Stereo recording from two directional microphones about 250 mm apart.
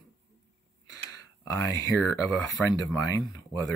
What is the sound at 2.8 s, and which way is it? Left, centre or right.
Speech, centre.